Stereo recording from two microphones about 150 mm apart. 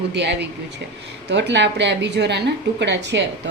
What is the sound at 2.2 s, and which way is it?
Speech, 90° right.